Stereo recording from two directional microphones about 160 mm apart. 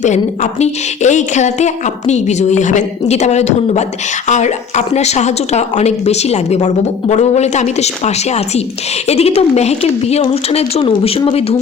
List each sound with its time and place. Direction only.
0.6 s a woman's voice: 50° left (ahead or behind)